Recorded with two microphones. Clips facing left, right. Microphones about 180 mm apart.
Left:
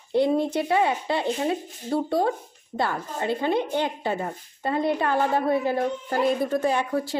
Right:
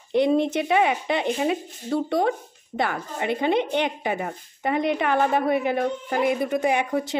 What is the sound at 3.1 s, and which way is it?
Speech, 20° right (ahead or behind).